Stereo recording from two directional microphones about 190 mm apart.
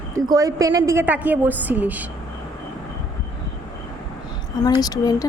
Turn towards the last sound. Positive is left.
turn(degrees=20)  # may be behind; listen again after turning